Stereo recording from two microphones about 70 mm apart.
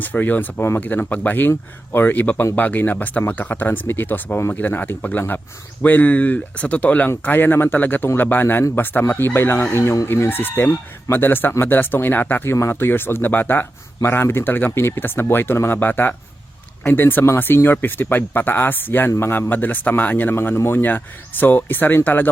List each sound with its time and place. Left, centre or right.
0.0 s speech: left
9.7 s speech: left
10.1 s speech: left